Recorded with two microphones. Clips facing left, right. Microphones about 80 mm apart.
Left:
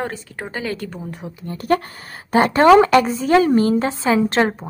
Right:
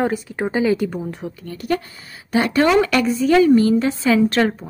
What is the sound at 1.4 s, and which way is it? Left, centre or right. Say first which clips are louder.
A woman's voice: left 4 dB; left.